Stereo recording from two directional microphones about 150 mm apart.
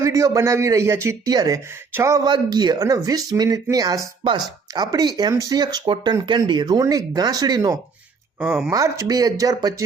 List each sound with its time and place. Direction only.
0.0 s speech: 20° right (ahead or behind)
8.4 s speech: 10° right (ahead or behind)
8.7 s speech: 25° right (ahead or behind)